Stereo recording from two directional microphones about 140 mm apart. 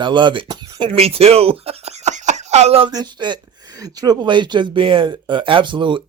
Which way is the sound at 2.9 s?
30° right (ahead or behind).